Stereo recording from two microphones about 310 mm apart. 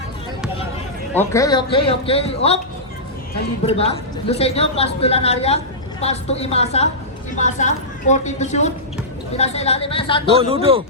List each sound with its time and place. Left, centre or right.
1.1 s a man's voice: centre
3.7 s a woman's voice: centre
10.3 s a man's voice: centre